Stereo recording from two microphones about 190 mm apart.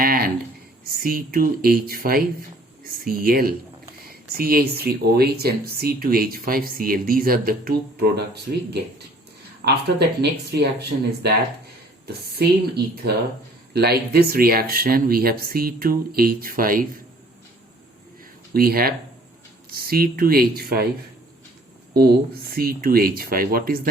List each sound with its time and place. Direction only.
0.0 s speech: 50° right (ahead or behind)
9.6 s a woman's voice: 55° right (ahead or behind)
18.5 s speech: 50° right (ahead or behind)
22.5 s speech: 50° right (ahead or behind)